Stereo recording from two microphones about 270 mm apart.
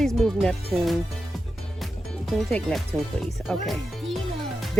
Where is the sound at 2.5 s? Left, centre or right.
Centre.